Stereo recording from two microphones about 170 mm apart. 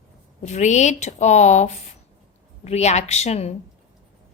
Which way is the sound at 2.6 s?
40° left (ahead or behind).